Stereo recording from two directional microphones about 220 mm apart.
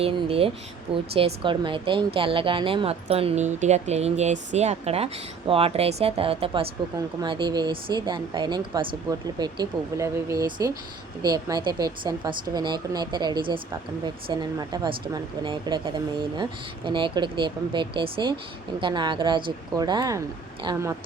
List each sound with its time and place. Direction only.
0.0 s speech: 25° right (ahead or behind)